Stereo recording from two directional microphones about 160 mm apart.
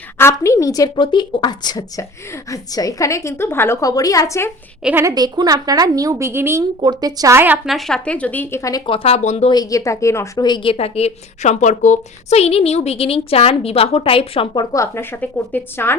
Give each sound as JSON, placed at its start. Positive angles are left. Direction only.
{"t": 0.2, "sound": "a woman's voice", "side_deg": 15}
{"t": 4.8, "sound": "a woman's voice", "side_deg": -10}
{"t": 5.0, "sound": "a woman's voice", "side_deg": -25}
{"t": 8.9, "sound": "a woman's voice", "side_deg": 40}
{"t": 9.5, "sound": "a woman's voice", "side_deg": 25}